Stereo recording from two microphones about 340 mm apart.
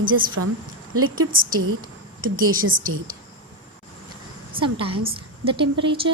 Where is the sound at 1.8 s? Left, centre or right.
Right.